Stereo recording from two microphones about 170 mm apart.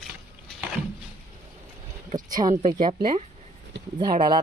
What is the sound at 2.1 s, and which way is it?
Speech, 20° right (ahead or behind).